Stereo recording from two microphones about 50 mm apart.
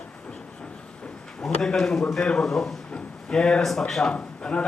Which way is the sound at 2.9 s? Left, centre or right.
Centre.